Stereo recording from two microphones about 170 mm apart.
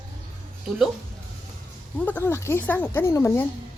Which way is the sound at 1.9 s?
10° left (ahead or behind).